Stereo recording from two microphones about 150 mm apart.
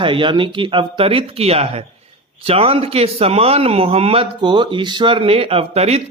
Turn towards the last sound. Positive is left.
turn(degrees=-45)  # may be behind; listen again after turning